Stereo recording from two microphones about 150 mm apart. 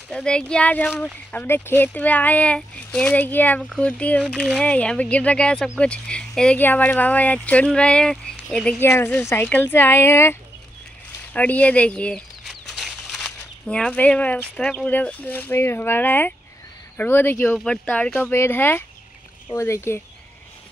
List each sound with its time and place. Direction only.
0.1 s speech: 5° left (ahead or behind)
8.8 s a woman's voice: 20° left (ahead or behind)
11.3 s speech: 10° left (ahead or behind)